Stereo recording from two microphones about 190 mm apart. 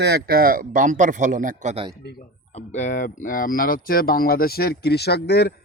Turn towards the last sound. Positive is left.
turn(degrees=60)  # may be behind; listen again after turning